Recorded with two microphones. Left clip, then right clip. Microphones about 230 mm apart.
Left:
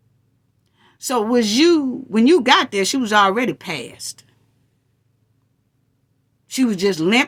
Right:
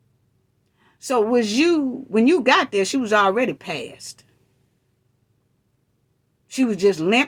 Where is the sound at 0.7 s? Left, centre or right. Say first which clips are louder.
Right 1 dB; left.